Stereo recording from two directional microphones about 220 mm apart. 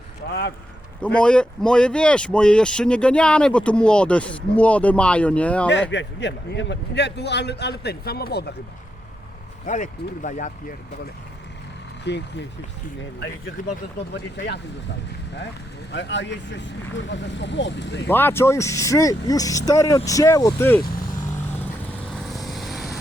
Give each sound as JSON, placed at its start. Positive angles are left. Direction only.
{"t": 0.3, "sound": "a man's voice", "side_deg": 45}
{"t": 1.0, "sound": "speech", "side_deg": 5}
{"t": 5.9, "sound": "a man's voice", "side_deg": 55}
{"t": 9.6, "sound": "speech", "side_deg": 35}
{"t": 12.1, "sound": "a man's voice", "side_deg": 50}
{"t": 13.6, "sound": "speech", "side_deg": 35}
{"t": 15.9, "sound": "a man's voice", "side_deg": 55}
{"t": 18.1, "sound": "speech", "side_deg": 10}
{"t": 22.3, "sound": "vehicle", "side_deg": 0}